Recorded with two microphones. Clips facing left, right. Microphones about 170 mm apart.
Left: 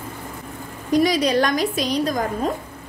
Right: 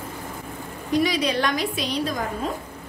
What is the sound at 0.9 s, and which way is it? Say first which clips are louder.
A woman's voice: left 4 dB; 40° left (ahead or behind).